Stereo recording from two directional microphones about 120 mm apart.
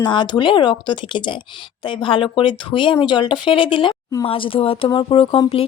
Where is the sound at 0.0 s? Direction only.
40° left (ahead or behind).